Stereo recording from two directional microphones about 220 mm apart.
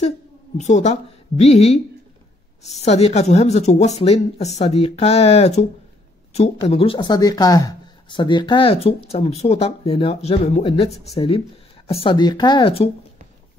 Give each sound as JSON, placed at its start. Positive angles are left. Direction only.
{"t": 0.6, "sound": "a woman's voice", "side_deg": 30}